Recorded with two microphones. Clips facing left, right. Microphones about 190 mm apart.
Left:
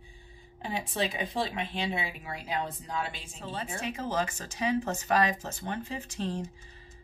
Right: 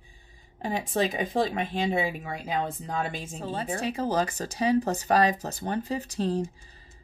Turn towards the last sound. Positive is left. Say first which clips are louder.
# right 6 dB
turn(degrees=-35)  # may be behind; listen again after turning